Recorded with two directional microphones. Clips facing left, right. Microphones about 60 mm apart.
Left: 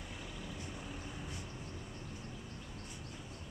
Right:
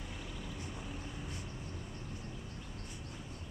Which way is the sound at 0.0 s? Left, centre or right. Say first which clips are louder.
Right 1 dB; centre.